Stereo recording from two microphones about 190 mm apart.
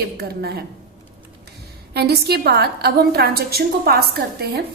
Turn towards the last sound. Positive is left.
turn(degrees=-55)  # may be behind; listen again after turning